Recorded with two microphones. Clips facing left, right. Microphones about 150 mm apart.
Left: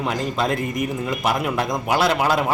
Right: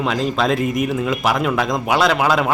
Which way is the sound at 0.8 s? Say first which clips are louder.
Right 4 dB; 80° right.